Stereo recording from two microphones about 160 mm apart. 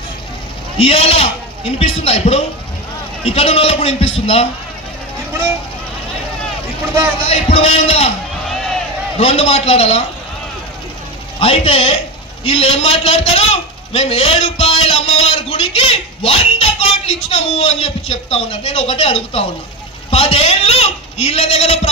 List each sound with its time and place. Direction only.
0.7 s a man's voice: 40° left (ahead or behind)
7.2 s a man's voice: 40° left (ahead or behind)
9.2 s a man's voice: 40° left (ahead or behind)
11.3 s a man's voice: 40° left (ahead or behind)